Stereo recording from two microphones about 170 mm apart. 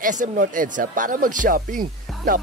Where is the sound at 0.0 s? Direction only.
50° right (ahead or behind).